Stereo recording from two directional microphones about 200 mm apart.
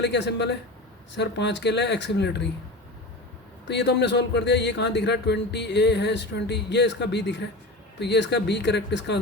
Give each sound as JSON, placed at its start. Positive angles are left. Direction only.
{"t": 0.0, "sound": "speech", "side_deg": 60}
{"t": 3.7, "sound": "speech", "side_deg": 60}